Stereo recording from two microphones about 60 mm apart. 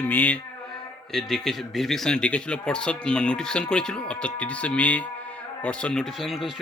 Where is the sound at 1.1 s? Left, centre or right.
Centre.